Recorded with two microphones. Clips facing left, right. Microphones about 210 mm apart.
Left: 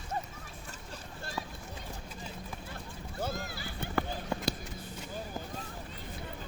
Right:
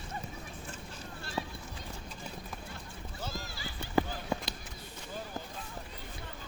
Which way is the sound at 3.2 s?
55° left (ahead or behind).